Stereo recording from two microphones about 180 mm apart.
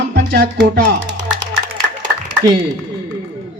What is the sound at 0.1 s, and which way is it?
Music, 75° right (ahead or behind).